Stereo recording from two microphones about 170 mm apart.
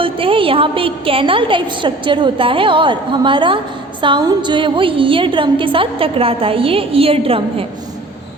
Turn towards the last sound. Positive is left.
turn(degrees=-35)  # may be behind; listen again after turning